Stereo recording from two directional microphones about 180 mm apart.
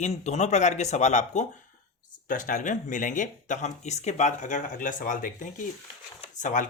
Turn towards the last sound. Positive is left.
turn(degrees=45)  # may be behind; listen again after turning